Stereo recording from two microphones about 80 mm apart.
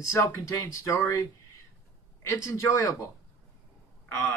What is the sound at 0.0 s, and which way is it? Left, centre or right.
Speech, left.